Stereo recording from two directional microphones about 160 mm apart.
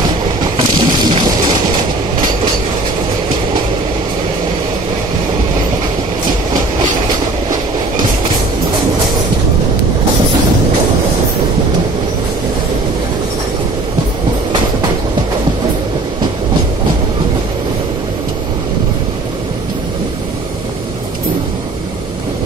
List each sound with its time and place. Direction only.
0.6 s music: 30° right (ahead or behind)